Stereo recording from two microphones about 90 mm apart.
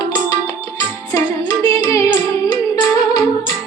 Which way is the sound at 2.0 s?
50° left (ahead or behind).